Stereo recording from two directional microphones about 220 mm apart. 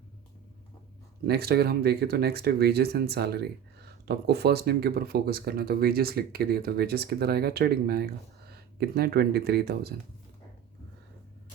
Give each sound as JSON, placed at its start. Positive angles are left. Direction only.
{"t": 1.2, "sound": "speech", "side_deg": -45}